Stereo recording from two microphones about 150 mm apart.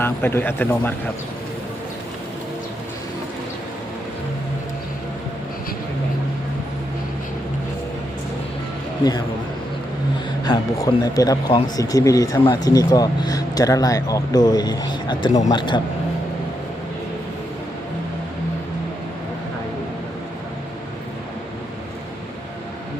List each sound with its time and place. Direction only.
0.0 s speech: 15° left (ahead or behind)
10.4 s a man's voice: 25° left (ahead or behind)